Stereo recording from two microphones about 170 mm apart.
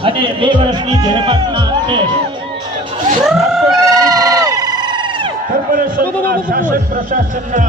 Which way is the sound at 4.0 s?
20° right (ahead or behind).